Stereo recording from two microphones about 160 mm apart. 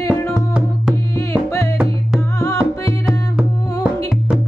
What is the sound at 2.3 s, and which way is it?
Music, 20° left (ahead or behind).